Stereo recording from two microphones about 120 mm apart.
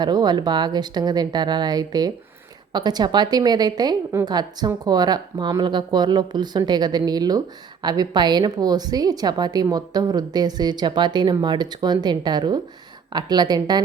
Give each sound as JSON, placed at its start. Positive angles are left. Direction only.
{"t": 0.0, "sound": "speech", "side_deg": -35}